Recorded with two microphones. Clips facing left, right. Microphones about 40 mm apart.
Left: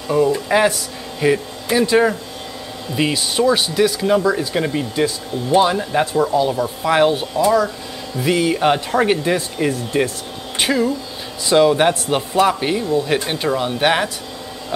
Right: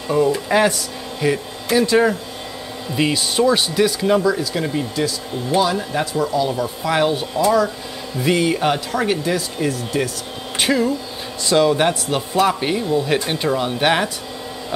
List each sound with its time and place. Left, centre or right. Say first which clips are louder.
0.1 s speech: left 1 dB; centre
4.4 s speech: left 2 dB; centre
7.3 s speech: right 2 dB; centre
8.6 s speech: left 3 dB; centre
10.6 s speech: even; centre
11.4 s speech: left 2 dB; centre